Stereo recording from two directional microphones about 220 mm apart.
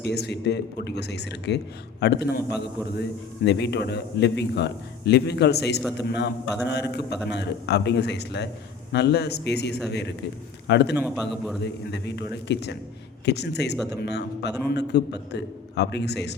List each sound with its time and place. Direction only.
0.0 s a man's voice: 50° left (ahead or behind)
10.9 s a man's voice: 5° right (ahead or behind)
11.6 s a man's voice: 50° left (ahead or behind)